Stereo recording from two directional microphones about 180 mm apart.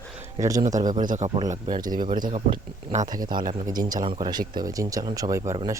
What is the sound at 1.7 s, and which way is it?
Speech, 20° right (ahead or behind).